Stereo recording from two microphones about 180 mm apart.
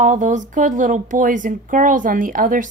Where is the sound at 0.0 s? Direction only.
45° right (ahead or behind).